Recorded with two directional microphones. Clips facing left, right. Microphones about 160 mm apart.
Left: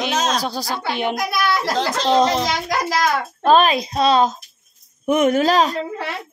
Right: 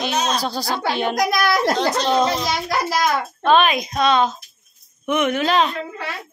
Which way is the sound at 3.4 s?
35° left (ahead or behind).